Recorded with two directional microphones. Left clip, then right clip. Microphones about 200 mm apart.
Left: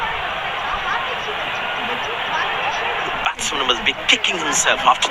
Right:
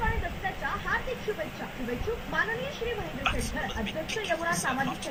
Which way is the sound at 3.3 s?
40° left (ahead or behind).